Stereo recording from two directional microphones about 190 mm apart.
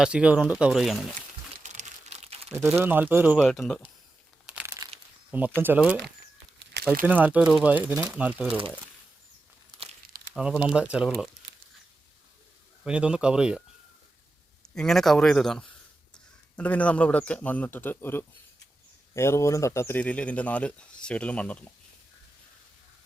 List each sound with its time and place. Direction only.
0.0 s speech: 5° right (ahead or behind)
1.6 s crumpling: 40° right (ahead or behind)
2.6 s speech: 10° right (ahead or behind)
4.4 s crumpling: 5° right (ahead or behind)
5.3 s speech: 10° right (ahead or behind)
7.0 s speech: 10° right (ahead or behind)
10.3 s speech: 5° right (ahead or behind)
12.8 s speech: 5° right (ahead or behind)
14.8 s a man's voice: centre (ahead or behind)